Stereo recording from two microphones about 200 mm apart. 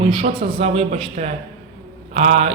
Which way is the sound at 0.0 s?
25° right (ahead or behind).